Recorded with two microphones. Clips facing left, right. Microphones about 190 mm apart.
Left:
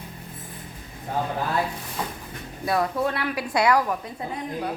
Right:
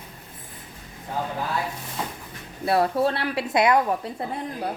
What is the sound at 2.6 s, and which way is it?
A woman's voice, 30° right (ahead or behind).